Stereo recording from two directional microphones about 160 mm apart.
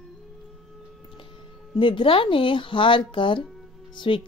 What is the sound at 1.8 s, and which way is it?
Speech, 30° left (ahead or behind).